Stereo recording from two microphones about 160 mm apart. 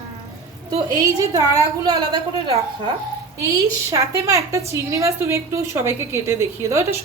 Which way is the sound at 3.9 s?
20° right (ahead or behind).